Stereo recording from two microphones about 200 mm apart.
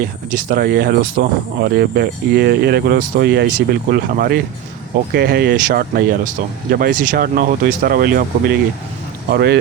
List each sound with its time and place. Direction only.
0.0 s speech: 45° right (ahead or behind)